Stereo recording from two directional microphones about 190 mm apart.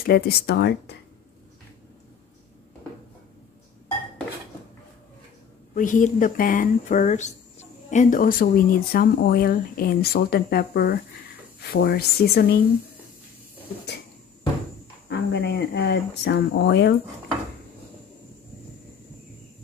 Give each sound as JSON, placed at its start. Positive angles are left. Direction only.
{"t": 0.0, "sound": "speech", "side_deg": 55}
{"t": 5.8, "sound": "speech", "side_deg": 45}
{"t": 15.0, "sound": "speech", "side_deg": 65}